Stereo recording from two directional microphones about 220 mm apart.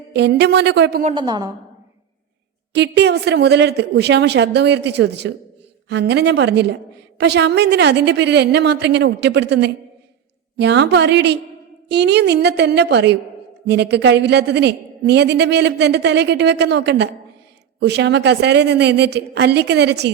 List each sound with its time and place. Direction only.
0.1 s a woman's voice: 50° right (ahead or behind)
1.1 s a woman's voice: 20° right (ahead or behind)
2.7 s a woman's voice: 50° right (ahead or behind)